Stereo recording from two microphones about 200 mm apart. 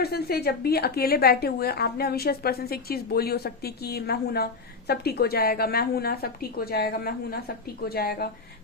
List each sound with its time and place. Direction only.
0.0 s a woman's voice: 50° left (ahead or behind)